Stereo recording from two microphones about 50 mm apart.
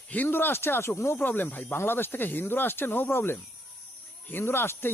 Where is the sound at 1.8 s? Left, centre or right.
Left.